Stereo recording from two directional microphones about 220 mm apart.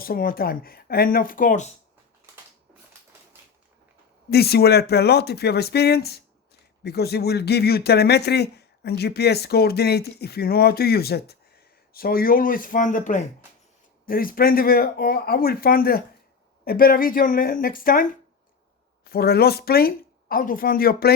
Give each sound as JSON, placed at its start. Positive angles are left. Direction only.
{"t": 0.0, "sound": "speech", "side_deg": 40}
{"t": 4.3, "sound": "speech", "side_deg": 45}